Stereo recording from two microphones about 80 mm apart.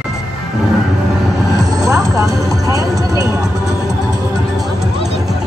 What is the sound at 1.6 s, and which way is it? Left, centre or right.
Music, right.